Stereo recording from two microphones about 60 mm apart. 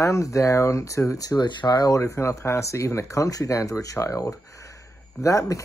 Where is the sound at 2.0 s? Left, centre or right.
Left.